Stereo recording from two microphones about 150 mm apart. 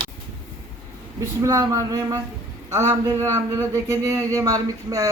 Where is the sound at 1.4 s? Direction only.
20° right (ahead or behind).